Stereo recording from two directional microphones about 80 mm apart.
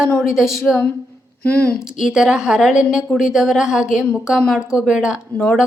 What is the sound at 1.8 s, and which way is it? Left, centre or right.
A woman's voice, centre.